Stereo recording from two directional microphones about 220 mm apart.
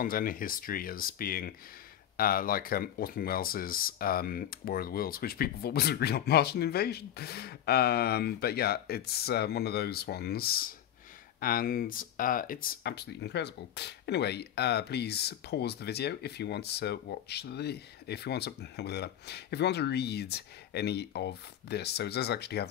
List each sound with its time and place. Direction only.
0.0 s speech: 40° left (ahead or behind)